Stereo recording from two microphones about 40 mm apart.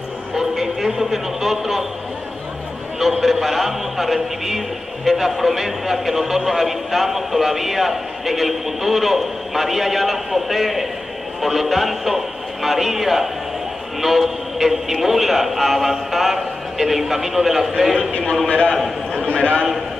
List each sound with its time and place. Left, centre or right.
0.4 s a man's voice: centre
3.0 s a man's voice: centre
19.2 s a man's voice: left